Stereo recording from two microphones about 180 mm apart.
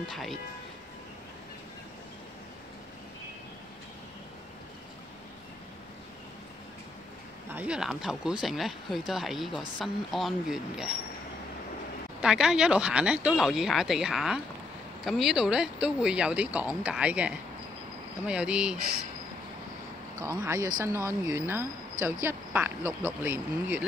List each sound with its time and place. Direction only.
0.1 s speech: centre (ahead or behind)
7.5 s speech: 5° right (ahead or behind)
12.2 s speech: 5° right (ahead or behind)
20.4 s speech: 15° right (ahead or behind)